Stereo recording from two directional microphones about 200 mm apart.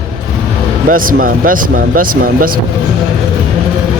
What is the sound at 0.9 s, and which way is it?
A man's voice, 45° right (ahead or behind).